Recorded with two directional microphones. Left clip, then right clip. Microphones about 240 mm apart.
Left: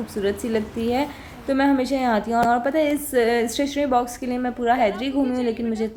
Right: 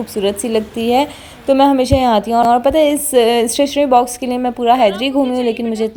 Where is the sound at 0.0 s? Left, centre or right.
Right.